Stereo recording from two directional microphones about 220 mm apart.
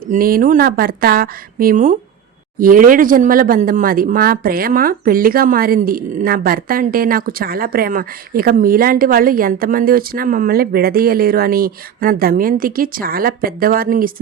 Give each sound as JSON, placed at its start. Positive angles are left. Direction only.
{"t": 0.1, "sound": "speech", "side_deg": -40}